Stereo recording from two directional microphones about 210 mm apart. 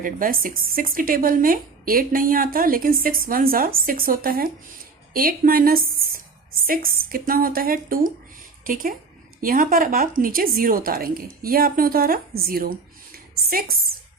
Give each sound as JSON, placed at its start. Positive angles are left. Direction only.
{"t": 0.0, "sound": "a woman's voice", "side_deg": -40}